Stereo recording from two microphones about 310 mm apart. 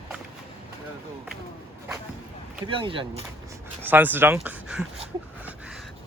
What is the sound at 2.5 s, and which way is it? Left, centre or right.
Speech, centre.